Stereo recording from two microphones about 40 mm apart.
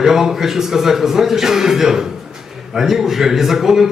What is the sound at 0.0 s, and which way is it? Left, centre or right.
A man's voice, centre.